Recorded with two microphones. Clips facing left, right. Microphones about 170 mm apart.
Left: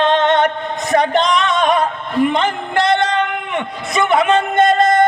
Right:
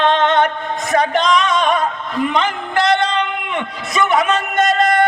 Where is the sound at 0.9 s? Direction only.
20° left (ahead or behind).